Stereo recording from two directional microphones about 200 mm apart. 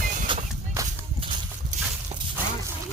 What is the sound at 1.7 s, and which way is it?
Walk, 40° right (ahead or behind).